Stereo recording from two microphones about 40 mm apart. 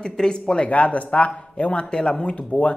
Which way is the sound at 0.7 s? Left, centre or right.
Left.